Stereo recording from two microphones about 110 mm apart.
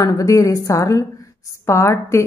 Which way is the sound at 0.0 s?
30° left (ahead or behind).